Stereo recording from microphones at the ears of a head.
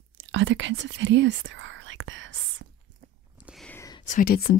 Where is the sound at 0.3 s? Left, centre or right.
Right.